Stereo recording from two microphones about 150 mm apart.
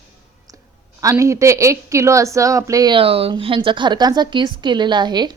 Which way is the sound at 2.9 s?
40° right (ahead or behind).